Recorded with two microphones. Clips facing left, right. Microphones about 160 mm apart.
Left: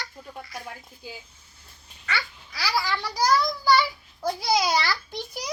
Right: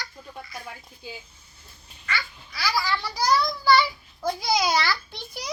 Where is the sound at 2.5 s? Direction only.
35° left (ahead or behind).